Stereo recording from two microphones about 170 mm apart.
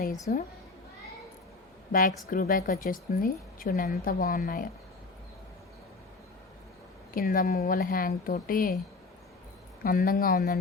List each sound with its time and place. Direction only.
0.3 s a woman's voice: 55° left (ahead or behind)
1.9 s a woman's voice: 55° left (ahead or behind)
7.1 s a woman's voice: 55° left (ahead or behind)
9.8 s a woman's voice: 60° left (ahead or behind)